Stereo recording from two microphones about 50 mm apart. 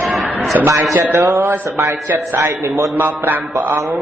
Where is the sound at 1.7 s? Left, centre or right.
Right.